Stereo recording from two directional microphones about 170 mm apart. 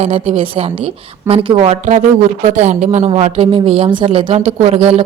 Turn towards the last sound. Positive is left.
turn(degrees=-35)  # may be behind; listen again after turning